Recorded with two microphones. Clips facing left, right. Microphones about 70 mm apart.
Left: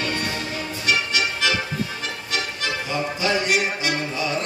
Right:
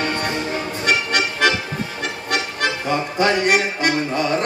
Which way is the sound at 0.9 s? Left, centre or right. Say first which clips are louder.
Right 2 dB; right.